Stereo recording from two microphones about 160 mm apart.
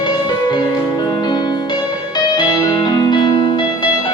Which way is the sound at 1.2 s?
30° left (ahead or behind).